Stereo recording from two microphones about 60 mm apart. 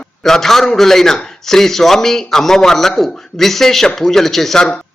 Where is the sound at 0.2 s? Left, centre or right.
Centre.